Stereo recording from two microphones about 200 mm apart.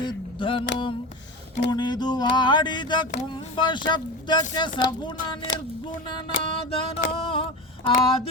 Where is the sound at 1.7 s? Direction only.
20° left (ahead or behind).